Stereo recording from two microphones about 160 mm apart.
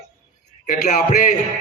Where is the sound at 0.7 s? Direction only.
55° left (ahead or behind).